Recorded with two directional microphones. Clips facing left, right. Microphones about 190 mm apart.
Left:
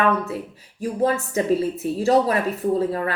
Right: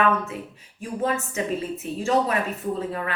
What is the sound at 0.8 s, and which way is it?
Speech, 35° left (ahead or behind).